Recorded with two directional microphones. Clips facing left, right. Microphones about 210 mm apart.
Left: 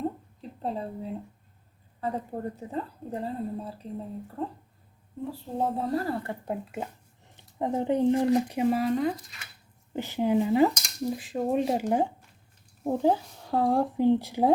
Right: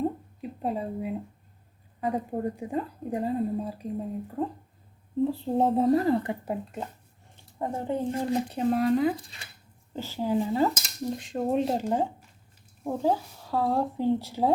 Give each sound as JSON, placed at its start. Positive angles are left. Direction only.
{"t": 0.4, "sound": "a woman's voice", "side_deg": -10}
{"t": 5.3, "sound": "a woman's voice", "side_deg": -25}
{"t": 7.6, "sound": "a woman's voice", "side_deg": 20}
{"t": 9.1, "sound": "speech", "side_deg": -30}
{"t": 9.9, "sound": "a woman's voice", "side_deg": 15}
{"t": 10.8, "sound": "a woman's voice", "side_deg": 0}